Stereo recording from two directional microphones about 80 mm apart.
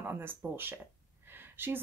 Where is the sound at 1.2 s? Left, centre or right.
Right.